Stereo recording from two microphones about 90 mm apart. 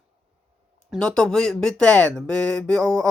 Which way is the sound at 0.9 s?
10° left (ahead or behind).